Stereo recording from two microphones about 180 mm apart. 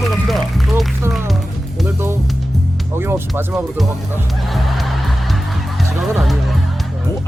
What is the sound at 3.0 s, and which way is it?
Speech, 10° right (ahead or behind).